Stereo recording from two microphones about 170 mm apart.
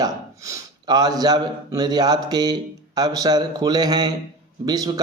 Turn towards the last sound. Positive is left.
turn(degrees=-20)  # may be behind; listen again after turning